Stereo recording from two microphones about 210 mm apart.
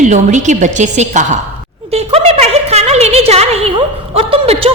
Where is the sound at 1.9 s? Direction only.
30° right (ahead or behind).